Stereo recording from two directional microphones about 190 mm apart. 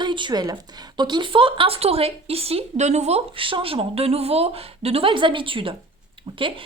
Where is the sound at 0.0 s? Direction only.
25° right (ahead or behind).